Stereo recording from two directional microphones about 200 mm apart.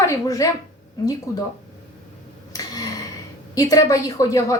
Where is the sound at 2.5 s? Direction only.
20° left (ahead or behind).